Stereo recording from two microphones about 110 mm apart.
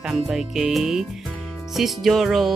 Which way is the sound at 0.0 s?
5° right (ahead or behind).